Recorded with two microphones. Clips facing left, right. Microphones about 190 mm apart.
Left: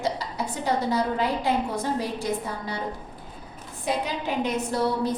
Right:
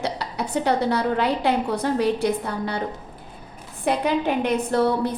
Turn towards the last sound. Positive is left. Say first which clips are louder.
# right 4 dB
turn(degrees=-60)  # may be behind; listen again after turning